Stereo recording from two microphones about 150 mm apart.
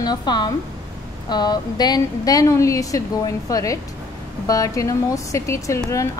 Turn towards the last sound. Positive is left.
turn(degrees=20)  # may be behind; listen again after turning